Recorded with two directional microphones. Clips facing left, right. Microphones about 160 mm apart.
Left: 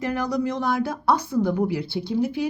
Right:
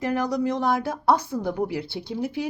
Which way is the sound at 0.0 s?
35° right (ahead or behind).